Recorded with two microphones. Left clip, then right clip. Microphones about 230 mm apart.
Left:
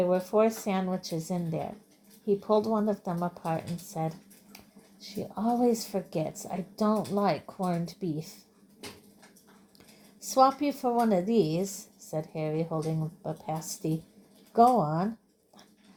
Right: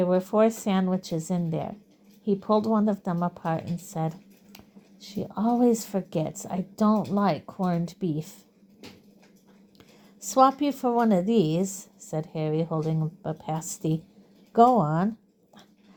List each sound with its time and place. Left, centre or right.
0.0 s speech: right
10.2 s speech: right